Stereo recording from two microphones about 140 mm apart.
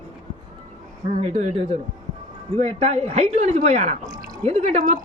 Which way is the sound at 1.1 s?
50° right (ahead or behind).